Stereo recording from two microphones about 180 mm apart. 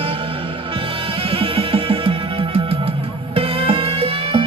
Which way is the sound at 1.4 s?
30° right (ahead or behind).